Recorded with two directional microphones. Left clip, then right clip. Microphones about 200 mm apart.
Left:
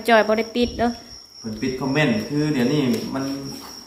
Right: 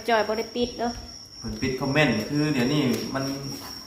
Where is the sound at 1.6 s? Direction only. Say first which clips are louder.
Left 1 dB; 5° right (ahead or behind).